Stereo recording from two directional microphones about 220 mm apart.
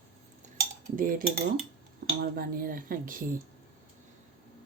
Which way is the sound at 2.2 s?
40° right (ahead or behind).